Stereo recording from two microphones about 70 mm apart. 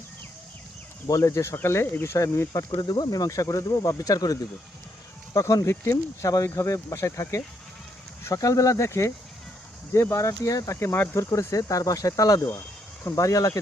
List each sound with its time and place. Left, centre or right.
1.0 s speech: left
2.1 s speech: left
2.8 s speech: left
5.3 s speech: left
10.8 s speech: left